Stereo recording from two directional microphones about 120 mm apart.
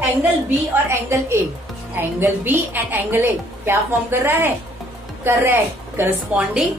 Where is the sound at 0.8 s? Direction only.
20° right (ahead or behind).